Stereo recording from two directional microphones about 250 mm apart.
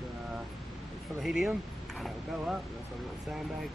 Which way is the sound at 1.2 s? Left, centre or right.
Centre.